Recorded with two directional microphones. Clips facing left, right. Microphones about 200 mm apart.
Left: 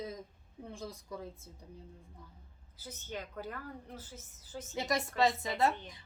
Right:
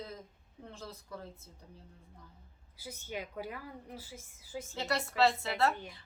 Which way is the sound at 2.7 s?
10° right (ahead or behind).